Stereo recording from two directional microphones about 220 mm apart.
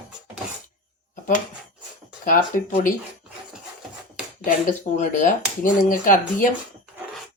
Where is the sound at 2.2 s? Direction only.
35° left (ahead or behind).